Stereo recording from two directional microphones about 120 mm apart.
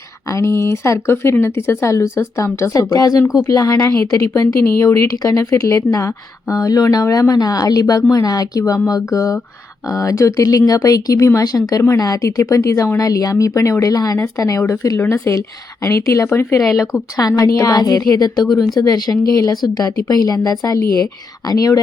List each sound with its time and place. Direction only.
0.3 s a woman's voice: 25° left (ahead or behind)